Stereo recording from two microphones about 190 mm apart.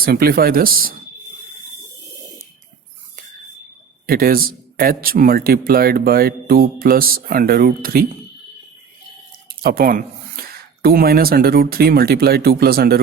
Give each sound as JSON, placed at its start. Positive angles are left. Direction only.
{"t": 0.0, "sound": "a man's voice", "side_deg": -55}
{"t": 4.0, "sound": "a man's voice", "side_deg": -50}
{"t": 9.6, "sound": "a man's voice", "side_deg": -50}